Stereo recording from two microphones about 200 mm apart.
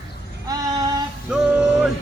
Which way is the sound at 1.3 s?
5° right (ahead or behind).